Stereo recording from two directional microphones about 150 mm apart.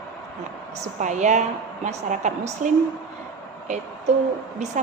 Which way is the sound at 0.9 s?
55° right (ahead or behind).